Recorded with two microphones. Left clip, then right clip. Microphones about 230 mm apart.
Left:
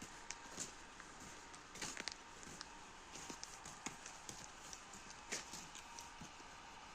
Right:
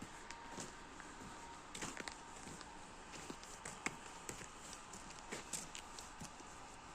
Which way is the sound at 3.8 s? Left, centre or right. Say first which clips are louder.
Right 7 dB; right.